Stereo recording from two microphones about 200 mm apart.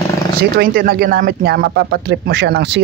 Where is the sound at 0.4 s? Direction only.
50° right (ahead or behind).